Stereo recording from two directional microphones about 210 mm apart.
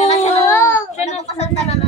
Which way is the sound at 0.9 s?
30° left (ahead or behind).